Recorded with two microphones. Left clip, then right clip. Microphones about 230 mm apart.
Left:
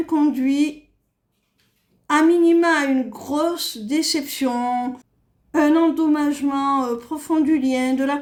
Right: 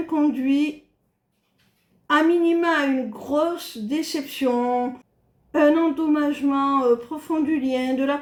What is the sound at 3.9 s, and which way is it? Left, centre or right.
Speech, left.